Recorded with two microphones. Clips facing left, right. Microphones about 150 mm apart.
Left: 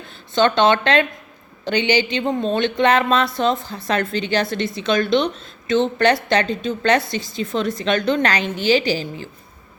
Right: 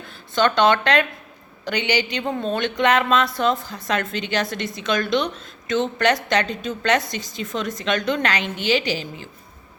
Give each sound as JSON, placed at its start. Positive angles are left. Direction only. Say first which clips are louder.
{"t": 0.3, "sound": "a woman's voice", "louder": "left 2 dB", "side_deg": 25}